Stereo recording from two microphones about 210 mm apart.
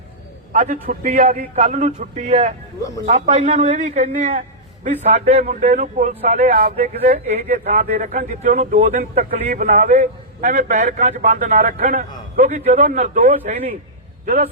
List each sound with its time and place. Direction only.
0.5 s a man's voice: 40° right (ahead or behind)